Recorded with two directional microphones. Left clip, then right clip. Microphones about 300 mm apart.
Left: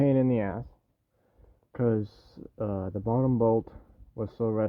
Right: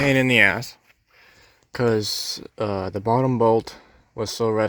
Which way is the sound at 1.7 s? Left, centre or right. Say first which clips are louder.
Right 8 dB; centre.